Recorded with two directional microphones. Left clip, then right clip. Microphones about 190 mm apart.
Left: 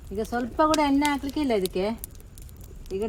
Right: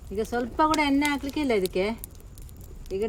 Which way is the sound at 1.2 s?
Centre (ahead or behind).